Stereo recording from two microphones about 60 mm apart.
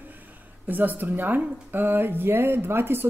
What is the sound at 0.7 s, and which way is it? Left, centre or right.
Speech, right.